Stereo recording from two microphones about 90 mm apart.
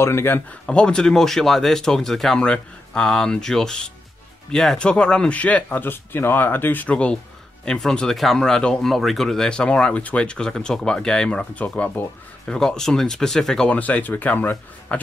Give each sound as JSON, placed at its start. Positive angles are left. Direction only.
{"t": 0.0, "sound": "a man's voice", "side_deg": 30}
{"t": 0.5, "sound": "speech", "side_deg": 10}
{"t": 12.5, "sound": "speech", "side_deg": 5}
{"t": 13.7, "sound": "speech", "side_deg": 15}